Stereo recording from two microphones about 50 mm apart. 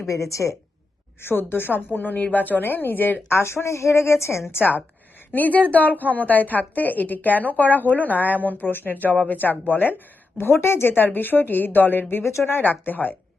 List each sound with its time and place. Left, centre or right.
0.1 s a woman's voice: left
1.2 s a woman's voice: left
3.3 s a woman's voice: left
5.3 s a woman's voice: left
10.3 s a woman's voice: left